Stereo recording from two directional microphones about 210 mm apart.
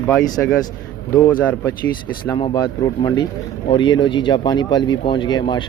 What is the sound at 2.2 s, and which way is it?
Speech, 20° left (ahead or behind).